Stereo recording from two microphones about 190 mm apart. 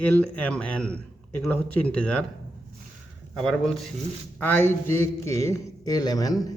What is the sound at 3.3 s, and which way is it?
A man's voice, 5° left (ahead or behind).